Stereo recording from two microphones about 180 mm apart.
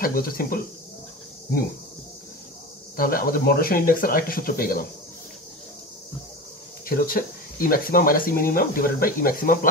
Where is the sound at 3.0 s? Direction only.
55° left (ahead or behind).